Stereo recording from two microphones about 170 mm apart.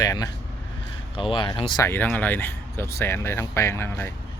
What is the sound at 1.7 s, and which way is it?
Speech, 15° left (ahead or behind).